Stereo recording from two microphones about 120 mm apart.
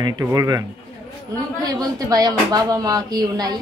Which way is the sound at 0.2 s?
25° right (ahead or behind).